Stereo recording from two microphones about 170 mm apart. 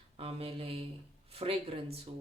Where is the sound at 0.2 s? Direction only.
35° right (ahead or behind).